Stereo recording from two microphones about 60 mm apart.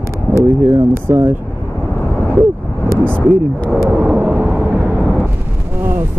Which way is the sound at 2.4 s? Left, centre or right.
Right.